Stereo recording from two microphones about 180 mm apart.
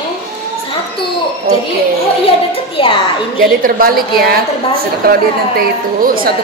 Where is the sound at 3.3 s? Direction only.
55° right (ahead or behind).